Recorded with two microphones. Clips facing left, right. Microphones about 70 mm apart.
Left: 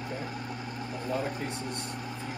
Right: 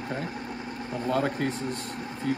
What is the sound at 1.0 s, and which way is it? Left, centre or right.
Speech, right.